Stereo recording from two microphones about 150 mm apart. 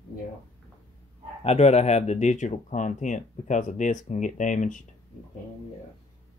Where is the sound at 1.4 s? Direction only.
45° left (ahead or behind).